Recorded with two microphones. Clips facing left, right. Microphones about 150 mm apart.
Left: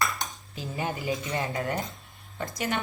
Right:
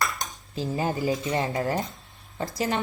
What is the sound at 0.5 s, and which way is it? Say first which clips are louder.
Speech: right 5 dB; 35° right (ahead or behind).